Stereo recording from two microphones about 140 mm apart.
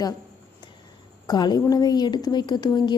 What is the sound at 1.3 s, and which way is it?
A woman's voice, 30° left (ahead or behind).